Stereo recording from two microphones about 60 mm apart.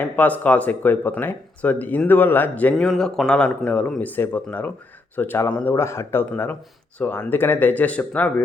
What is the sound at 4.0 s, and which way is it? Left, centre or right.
Speech, left.